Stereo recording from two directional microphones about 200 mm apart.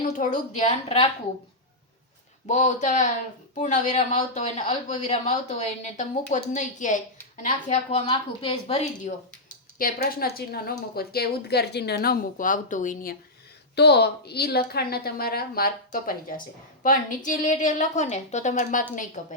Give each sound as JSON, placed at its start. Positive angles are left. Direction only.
{"t": 0.2, "sound": "speech", "side_deg": 40}
{"t": 2.5, "sound": "speech", "side_deg": 35}
{"t": 13.7, "sound": "speech", "side_deg": 55}